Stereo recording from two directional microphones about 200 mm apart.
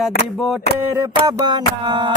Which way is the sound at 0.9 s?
15° right (ahead or behind).